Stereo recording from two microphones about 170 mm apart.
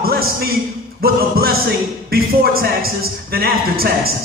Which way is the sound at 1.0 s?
60° right (ahead or behind).